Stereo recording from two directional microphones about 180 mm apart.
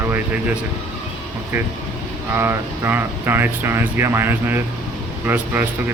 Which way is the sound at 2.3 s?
15° right (ahead or behind).